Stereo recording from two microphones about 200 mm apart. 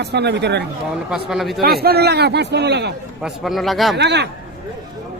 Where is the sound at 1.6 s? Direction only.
50° right (ahead or behind).